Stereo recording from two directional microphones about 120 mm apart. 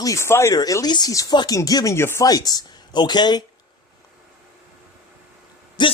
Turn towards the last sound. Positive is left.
turn(degrees=40)  # may be behind; listen again after turning